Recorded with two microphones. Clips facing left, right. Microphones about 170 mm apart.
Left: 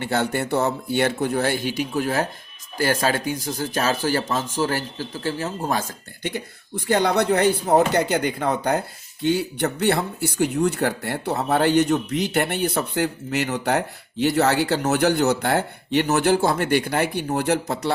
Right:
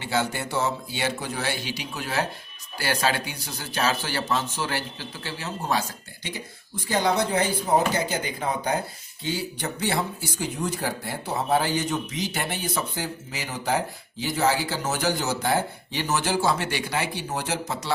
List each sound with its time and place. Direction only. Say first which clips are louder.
0.0 s speech: left 4 dB; 55° left (ahead or behind)
6.2 s speech: left 8 dB; 60° left (ahead or behind)